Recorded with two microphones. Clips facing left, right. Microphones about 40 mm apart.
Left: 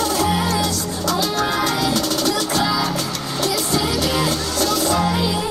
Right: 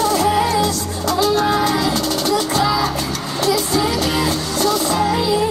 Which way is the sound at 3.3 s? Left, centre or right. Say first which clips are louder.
Right 3 dB; right.